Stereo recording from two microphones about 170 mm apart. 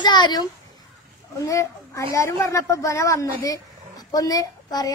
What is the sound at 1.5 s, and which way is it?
A woman's voice, 20° left (ahead or behind).